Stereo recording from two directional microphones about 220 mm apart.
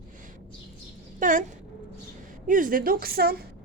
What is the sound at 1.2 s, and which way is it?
Speech, 35° right (ahead or behind).